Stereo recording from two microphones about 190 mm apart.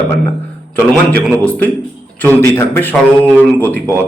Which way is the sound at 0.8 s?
10° left (ahead or behind).